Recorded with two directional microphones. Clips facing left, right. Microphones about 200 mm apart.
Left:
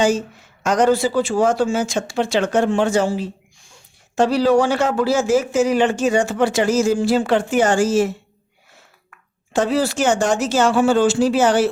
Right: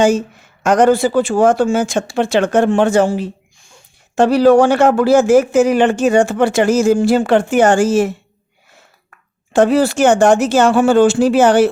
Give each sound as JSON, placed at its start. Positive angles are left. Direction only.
{"t": 0.6, "sound": "speech", "side_deg": -55}